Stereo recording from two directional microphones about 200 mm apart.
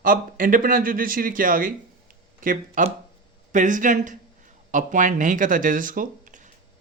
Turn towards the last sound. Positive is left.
turn(degrees=-40)  # may be behind; listen again after turning